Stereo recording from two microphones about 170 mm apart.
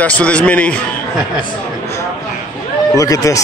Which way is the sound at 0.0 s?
10° left (ahead or behind).